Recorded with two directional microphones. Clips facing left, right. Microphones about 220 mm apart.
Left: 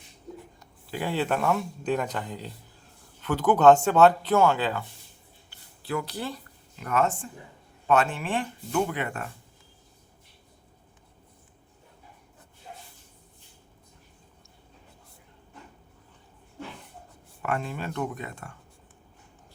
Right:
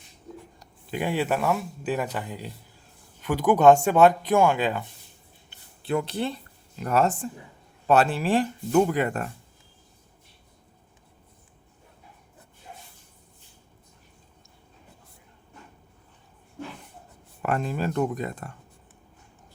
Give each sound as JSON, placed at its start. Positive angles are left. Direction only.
{"t": 0.9, "sound": "speech", "side_deg": -15}
{"t": 5.5, "sound": "a sound", "side_deg": -25}
{"t": 7.9, "sound": "speech", "side_deg": -35}
{"t": 17.4, "sound": "speech", "side_deg": -35}